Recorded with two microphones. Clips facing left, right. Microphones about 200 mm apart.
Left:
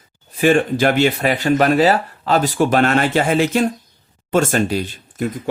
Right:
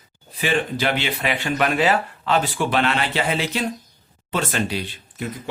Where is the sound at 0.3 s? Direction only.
45° left (ahead or behind).